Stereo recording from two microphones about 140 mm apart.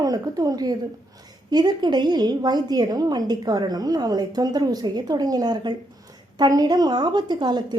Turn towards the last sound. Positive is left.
turn(degrees=-30)  # may be behind; listen again after turning